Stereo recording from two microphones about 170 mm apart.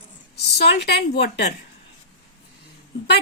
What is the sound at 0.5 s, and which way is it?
Speech, 75° left (ahead or behind).